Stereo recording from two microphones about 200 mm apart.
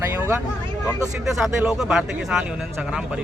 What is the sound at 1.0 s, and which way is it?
Speech, centre (ahead or behind).